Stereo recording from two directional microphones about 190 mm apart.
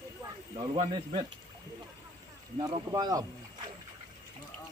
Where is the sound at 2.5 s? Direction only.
20° right (ahead or behind).